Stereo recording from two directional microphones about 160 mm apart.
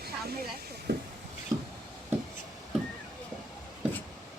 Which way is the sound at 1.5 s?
25° right (ahead or behind).